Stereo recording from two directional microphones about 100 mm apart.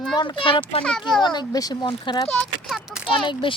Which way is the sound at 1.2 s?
45° left (ahead or behind).